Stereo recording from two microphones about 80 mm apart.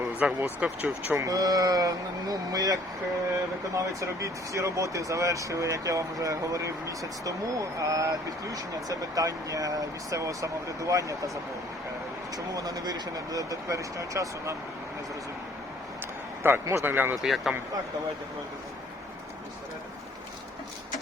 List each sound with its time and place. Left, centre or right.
0.2 s speech: centre
1.1 s speech: right
3.8 s speech: right
12.5 s speech: right
16.4 s a man's voice: right
17.2 s speech: centre